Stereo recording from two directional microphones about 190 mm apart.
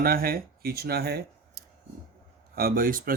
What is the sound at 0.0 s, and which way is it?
Speech, 50° right (ahead or behind).